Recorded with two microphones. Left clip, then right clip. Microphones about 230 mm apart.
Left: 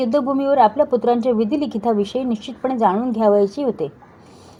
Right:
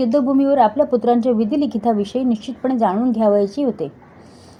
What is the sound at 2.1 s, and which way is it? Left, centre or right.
Speech, left.